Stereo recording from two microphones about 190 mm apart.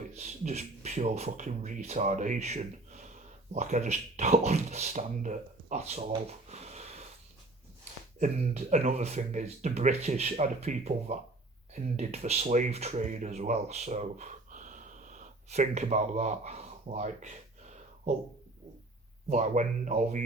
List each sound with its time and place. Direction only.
0.2 s speech: 35° right (ahead or behind)
8.2 s speech: 35° right (ahead or behind)
19.3 s speech: 40° right (ahead or behind)